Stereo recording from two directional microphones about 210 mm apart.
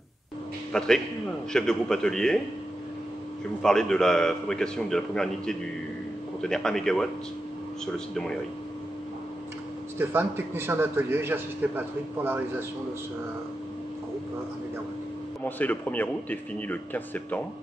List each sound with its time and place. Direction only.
0.7 s a man's voice: 5° left (ahead or behind)
3.6 s a man's voice: 5° left (ahead or behind)
9.9 s a man's voice: 10° right (ahead or behind)
15.4 s speech: 10° left (ahead or behind)